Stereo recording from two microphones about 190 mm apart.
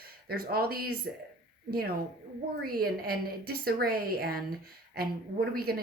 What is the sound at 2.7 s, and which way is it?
Speech, 50° right (ahead or behind).